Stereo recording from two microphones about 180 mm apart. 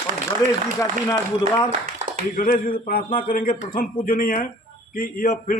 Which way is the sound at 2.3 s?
55° left (ahead or behind).